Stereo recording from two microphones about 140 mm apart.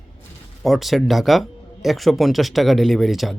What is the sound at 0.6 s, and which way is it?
Speech, centre (ahead or behind).